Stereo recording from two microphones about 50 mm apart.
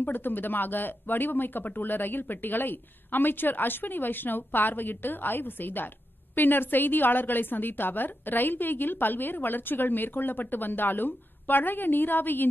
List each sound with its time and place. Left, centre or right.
0.0 s a woman's voice: left